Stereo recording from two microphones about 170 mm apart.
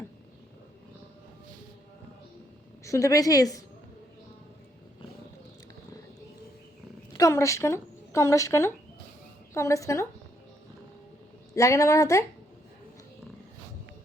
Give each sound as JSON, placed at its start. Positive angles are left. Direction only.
{"t": 2.8, "sound": "a woman's voice", "side_deg": 20}
{"t": 7.2, "sound": "a woman's voice", "side_deg": 15}
{"t": 11.5, "sound": "a woman's voice", "side_deg": 20}